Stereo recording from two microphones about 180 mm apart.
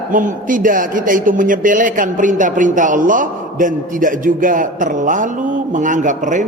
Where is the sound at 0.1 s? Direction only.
45° right (ahead or behind).